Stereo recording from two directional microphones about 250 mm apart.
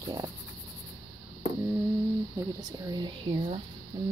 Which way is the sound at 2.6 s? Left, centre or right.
Centre.